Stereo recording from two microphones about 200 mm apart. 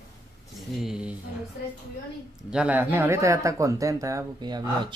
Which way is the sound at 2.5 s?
5° right (ahead or behind).